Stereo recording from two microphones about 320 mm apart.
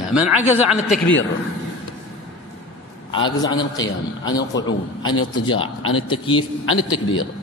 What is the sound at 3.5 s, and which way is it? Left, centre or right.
Speech, centre.